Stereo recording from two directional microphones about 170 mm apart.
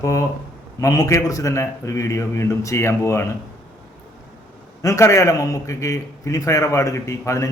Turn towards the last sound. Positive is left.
turn(degrees=15)  # may be behind; listen again after turning